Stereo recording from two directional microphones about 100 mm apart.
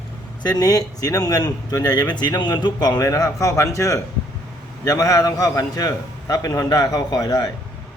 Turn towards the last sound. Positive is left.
turn(degrees=35)  # may be behind; listen again after turning